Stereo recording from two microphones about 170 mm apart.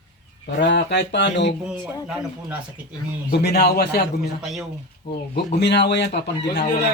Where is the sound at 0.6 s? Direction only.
90° left.